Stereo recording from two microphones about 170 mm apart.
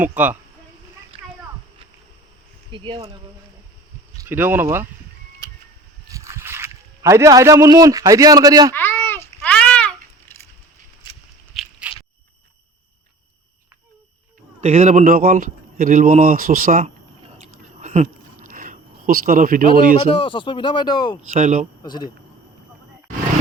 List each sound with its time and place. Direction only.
0.0 s speech: 10° right (ahead or behind)
1.1 s a sound: 30° right (ahead or behind)
2.7 s speech: 30° right (ahead or behind)
4.2 s speech: 10° right (ahead or behind)
6.1 s speech: 20° right (ahead or behind)
8.7 s a sound: 15° left (ahead or behind)
11.5 s a sound: 5° right (ahead or behind)
14.6 s speech: 35° right (ahead or behind); by 16.8 s 55° right (ahead or behind)
17.4 s a sound: 45° right (ahead or behind)
20.1 s speech: 30° left (ahead or behind)
21.3 s speech: 45° right (ahead or behind)
21.8 s speech: 25° left (ahead or behind)